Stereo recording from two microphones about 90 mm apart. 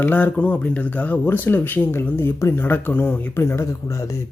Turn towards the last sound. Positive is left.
turn(degrees=35)  # may be behind; listen again after turning